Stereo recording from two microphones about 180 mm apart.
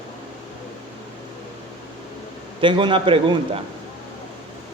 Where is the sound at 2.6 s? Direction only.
30° right (ahead or behind).